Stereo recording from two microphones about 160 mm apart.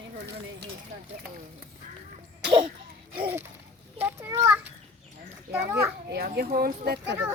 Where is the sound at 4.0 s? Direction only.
20° right (ahead or behind).